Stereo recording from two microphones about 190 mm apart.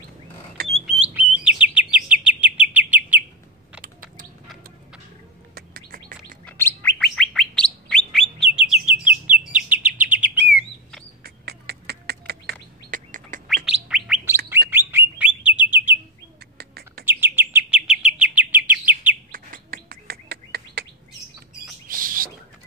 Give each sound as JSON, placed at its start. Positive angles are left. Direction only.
{"t": 0.6, "sound": "a sound", "side_deg": -50}
{"t": 1.0, "sound": "bird", "side_deg": -5}
{"t": 1.6, "sound": "chirp", "side_deg": -5}
{"t": 3.8, "sound": "a sound", "side_deg": -45}
{"t": 5.5, "sound": "bird", "side_deg": -50}
{"t": 6.4, "sound": "bird", "side_deg": 10}
{"t": 8.5, "sound": "chirp", "side_deg": -5}
{"t": 11.2, "sound": "bird", "side_deg": -55}
{"t": 12.9, "sound": "bird", "side_deg": -45}
{"t": 13.7, "sound": "bird", "side_deg": -5}
{"t": 16.5, "sound": "bird", "side_deg": -55}
{"t": 17.0, "sound": "chirp", "side_deg": -10}
{"t": 19.3, "sound": "bird", "side_deg": -50}
{"t": 21.8, "sound": "bird", "side_deg": -50}